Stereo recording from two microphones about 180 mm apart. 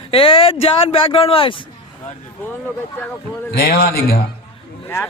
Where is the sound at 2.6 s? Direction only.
10° left (ahead or behind).